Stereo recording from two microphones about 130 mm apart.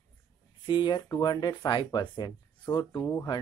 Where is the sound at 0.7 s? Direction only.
35° left (ahead or behind).